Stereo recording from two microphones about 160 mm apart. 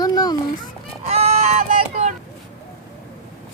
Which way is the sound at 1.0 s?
45° right (ahead or behind).